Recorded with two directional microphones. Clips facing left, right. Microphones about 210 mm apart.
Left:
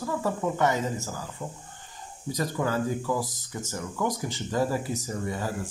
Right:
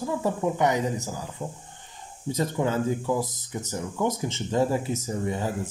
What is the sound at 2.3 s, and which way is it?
Speech, 25° right (ahead or behind).